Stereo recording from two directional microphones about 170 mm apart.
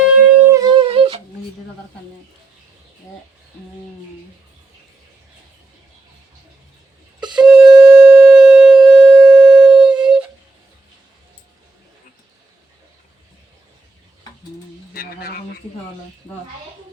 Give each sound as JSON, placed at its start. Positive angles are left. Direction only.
{"t": 0.0, "sound": "music", "side_deg": -10}
{"t": 7.3, "sound": "shofar", "side_deg": -5}
{"t": 14.9, "sound": "a sound", "side_deg": 60}